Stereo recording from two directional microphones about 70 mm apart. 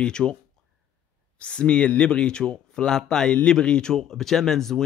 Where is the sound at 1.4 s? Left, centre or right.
Centre.